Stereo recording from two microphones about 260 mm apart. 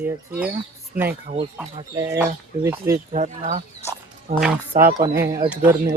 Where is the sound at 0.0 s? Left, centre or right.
Centre.